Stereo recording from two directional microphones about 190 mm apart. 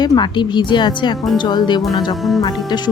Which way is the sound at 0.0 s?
20° left (ahead or behind).